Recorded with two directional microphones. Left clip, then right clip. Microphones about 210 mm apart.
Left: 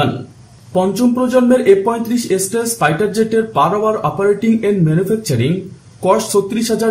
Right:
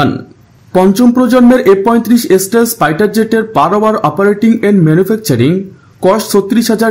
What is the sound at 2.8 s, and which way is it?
Speech, 50° right (ahead or behind).